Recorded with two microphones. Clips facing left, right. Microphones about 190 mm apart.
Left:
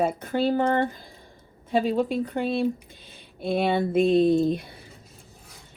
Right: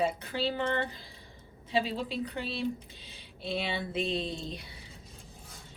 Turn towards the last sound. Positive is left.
turn(degrees=50)  # may be behind; listen again after turning